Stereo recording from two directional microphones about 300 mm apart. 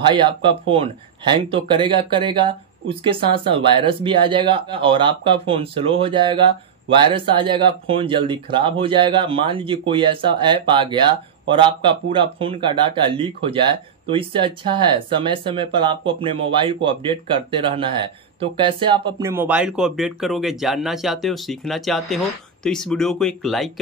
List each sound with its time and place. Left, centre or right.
0.1 s speech: centre